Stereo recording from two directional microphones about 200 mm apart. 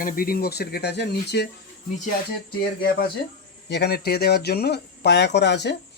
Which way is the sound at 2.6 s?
50° left (ahead or behind).